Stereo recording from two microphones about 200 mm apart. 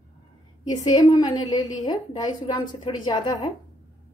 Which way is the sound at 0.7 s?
20° left (ahead or behind).